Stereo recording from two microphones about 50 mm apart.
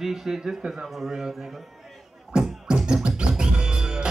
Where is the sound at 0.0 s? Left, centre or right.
Centre.